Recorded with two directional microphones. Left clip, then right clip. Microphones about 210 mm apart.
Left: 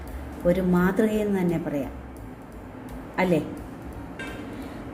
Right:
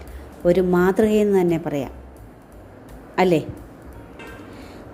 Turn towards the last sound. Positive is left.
turn(degrees=-45)  # may be behind; listen again after turning